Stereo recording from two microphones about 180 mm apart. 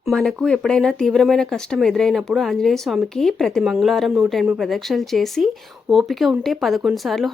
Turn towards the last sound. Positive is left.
turn(degrees=0)  # may be behind; listen again after turning